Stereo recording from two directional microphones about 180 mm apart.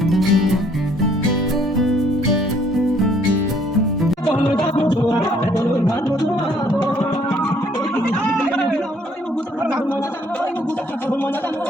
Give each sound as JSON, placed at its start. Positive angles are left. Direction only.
{"t": 0.0, "sound": "music", "side_deg": 0}
{"t": 1.8, "sound": "music", "side_deg": 0}
{"t": 4.4, "sound": "music", "side_deg": 25}